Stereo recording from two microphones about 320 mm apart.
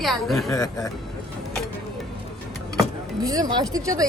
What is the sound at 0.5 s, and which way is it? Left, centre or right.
Speech, centre.